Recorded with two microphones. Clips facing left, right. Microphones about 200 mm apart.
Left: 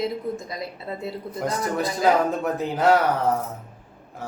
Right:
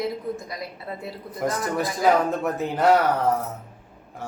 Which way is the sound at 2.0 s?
Centre (ahead or behind).